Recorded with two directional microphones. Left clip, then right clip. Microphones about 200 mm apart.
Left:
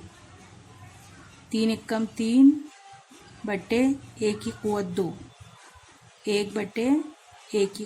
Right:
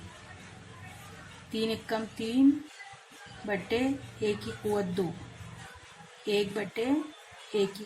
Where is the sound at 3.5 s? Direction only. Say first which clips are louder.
Left 5 dB; 30° left (ahead or behind).